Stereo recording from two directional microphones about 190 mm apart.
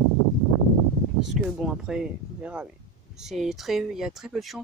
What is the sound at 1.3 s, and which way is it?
Speech, centre (ahead or behind).